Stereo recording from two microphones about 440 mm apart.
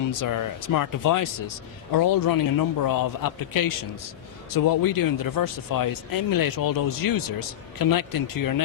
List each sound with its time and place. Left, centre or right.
0.1 s speech: left